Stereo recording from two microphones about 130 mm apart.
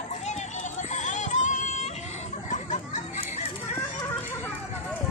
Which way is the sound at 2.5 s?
70° left (ahead or behind).